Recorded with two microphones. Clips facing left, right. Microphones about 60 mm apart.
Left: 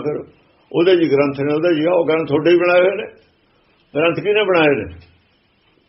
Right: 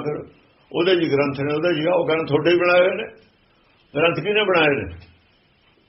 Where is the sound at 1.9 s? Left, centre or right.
Centre.